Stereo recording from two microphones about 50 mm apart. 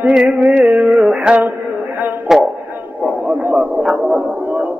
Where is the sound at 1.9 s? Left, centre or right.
Right.